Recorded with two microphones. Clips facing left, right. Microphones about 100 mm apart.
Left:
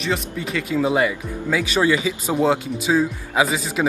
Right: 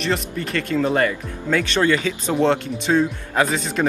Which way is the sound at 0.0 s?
Centre (ahead or behind).